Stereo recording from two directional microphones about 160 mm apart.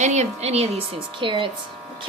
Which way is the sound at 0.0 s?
45° right (ahead or behind).